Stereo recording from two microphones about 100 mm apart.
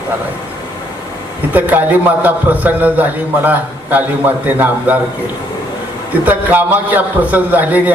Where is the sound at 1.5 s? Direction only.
15° right (ahead or behind).